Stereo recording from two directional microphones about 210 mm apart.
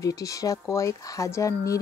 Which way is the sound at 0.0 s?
15° left (ahead or behind).